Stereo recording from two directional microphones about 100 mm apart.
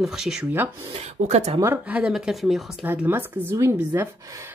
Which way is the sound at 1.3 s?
90° right.